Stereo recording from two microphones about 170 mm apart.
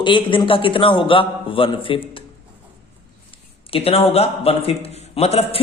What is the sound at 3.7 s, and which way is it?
Speech, 35° left (ahead or behind).